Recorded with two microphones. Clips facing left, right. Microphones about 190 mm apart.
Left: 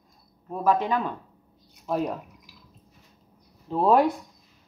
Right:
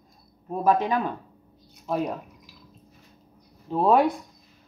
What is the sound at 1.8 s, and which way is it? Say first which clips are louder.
Speech: even; centre (ahead or behind).